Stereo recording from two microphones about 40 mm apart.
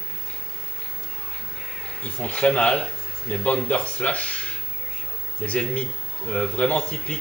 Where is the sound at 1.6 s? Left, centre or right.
Centre.